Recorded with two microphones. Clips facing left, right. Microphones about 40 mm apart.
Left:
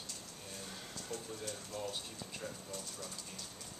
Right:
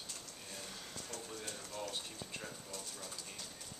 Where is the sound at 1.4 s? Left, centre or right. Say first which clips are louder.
Left 2 dB; centre.